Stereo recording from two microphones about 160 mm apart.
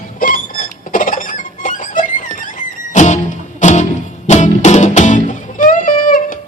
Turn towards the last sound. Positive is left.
turn(degrees=55)  # may be behind; listen again after turning